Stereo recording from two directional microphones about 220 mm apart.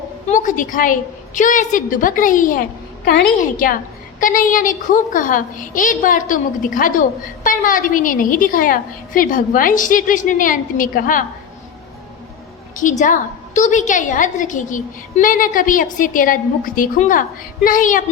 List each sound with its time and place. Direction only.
0.3 s a woman's voice: 35° left (ahead or behind)
12.7 s a woman's voice: 35° left (ahead or behind)